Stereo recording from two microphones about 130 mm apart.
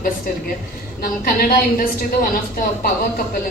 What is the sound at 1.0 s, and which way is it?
A woman's voice, 90° left.